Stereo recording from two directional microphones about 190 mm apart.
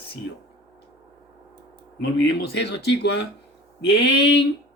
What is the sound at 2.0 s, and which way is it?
Speech, 60° left (ahead or behind).